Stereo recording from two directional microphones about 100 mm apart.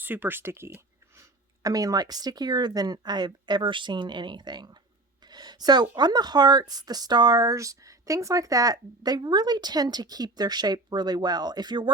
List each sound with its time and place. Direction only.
0.0 s speech: 20° right (ahead or behind)
1.6 s speech: 35° right (ahead or behind)